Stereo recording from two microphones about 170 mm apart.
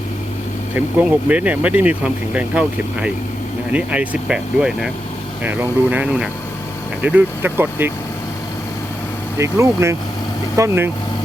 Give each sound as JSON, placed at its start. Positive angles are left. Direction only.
{"t": 0.7, "sound": "speech", "side_deg": -10}
{"t": 9.4, "sound": "speech", "side_deg": -15}